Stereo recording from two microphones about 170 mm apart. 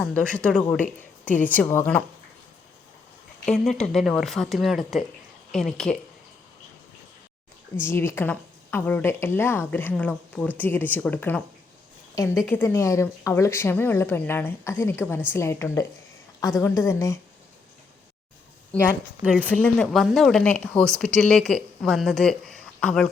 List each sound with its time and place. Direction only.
0.0 s a woman's voice: 5° left (ahead or behind)
3.4 s speech: 5° left (ahead or behind)
7.8 s a woman's voice: 15° left (ahead or behind)
18.7 s speech: 5° left (ahead or behind)